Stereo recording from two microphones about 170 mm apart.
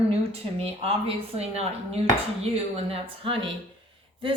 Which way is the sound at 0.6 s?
35° right (ahead or behind).